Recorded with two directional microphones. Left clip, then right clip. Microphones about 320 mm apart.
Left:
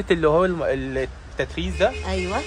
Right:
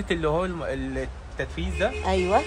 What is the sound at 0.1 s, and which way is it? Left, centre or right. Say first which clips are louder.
Speech: left 7 dB; left.